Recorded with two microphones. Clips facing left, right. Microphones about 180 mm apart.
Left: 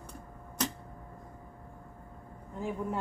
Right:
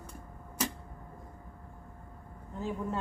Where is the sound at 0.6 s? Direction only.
5° right (ahead or behind).